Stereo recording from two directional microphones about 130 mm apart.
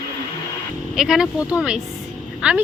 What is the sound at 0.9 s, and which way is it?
Speech, 5° right (ahead or behind).